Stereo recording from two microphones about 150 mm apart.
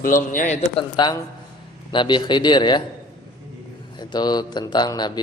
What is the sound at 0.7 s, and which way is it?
A man's voice, 30° left (ahead or behind).